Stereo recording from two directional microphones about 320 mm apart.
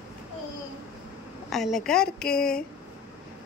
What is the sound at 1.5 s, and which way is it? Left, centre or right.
Speech, centre.